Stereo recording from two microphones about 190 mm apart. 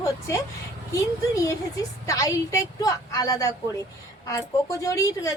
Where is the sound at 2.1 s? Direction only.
15° left (ahead or behind).